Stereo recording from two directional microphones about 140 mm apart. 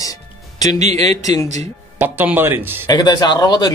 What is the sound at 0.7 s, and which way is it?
Speech, 50° right (ahead or behind).